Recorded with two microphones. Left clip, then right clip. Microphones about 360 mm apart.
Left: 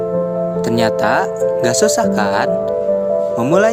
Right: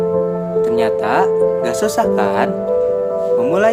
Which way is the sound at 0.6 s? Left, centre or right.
Centre.